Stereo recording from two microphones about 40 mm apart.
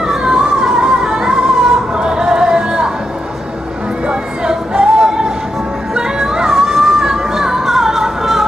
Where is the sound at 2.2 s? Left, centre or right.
Centre.